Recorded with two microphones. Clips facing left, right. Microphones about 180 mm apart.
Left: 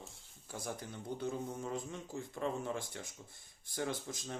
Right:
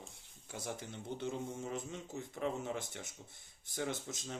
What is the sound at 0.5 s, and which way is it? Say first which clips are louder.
Speech: even; 20° right (ahead or behind).